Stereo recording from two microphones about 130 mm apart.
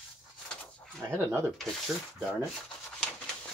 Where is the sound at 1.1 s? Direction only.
20° right (ahead or behind).